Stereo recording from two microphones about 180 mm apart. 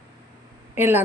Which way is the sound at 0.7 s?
10° right (ahead or behind).